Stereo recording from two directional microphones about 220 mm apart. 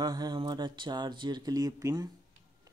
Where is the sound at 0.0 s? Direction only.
20° right (ahead or behind).